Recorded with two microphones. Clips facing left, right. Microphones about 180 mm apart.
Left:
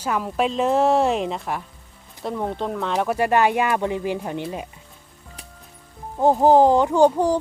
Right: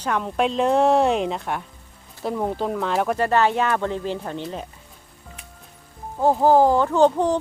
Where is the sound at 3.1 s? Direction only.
15° left (ahead or behind).